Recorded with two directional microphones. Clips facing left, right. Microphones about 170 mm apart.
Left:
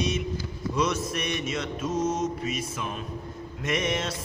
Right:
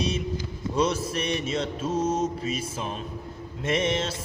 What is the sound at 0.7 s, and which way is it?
Mantra, 30° right (ahead or behind).